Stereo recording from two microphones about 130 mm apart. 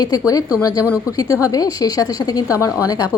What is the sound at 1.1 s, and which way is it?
A woman's voice, 25° left (ahead or behind).